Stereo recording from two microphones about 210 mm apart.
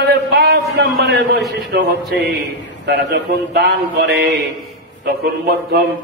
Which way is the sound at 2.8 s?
55° right (ahead or behind).